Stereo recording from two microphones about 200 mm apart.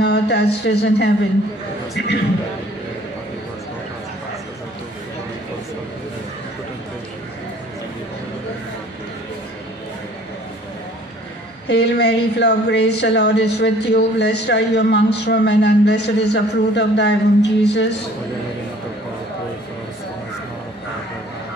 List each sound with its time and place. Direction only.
0.0 s a woman's voice: 55° left (ahead or behind)
11.6 s a woman's voice: 55° left (ahead or behind)